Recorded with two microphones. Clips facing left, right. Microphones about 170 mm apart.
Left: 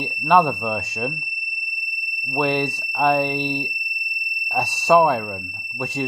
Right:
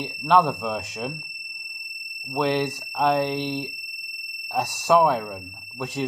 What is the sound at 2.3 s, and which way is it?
Speech, centre (ahead or behind).